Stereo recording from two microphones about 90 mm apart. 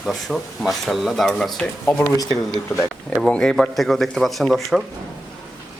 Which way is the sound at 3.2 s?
10° left (ahead or behind).